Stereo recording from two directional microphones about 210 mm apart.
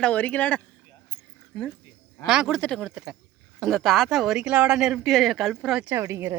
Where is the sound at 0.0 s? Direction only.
5° left (ahead or behind).